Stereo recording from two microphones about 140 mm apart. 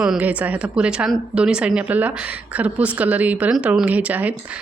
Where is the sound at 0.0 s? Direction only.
10° right (ahead or behind).